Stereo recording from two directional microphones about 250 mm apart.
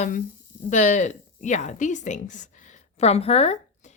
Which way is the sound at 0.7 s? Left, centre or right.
Left.